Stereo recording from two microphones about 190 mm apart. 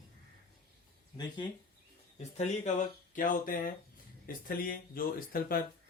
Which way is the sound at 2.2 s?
35° left (ahead or behind).